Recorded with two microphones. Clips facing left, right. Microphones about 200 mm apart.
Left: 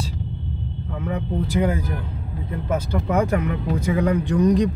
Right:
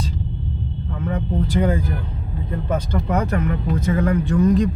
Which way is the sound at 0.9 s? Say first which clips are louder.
Right 1 dB; 10° left (ahead or behind).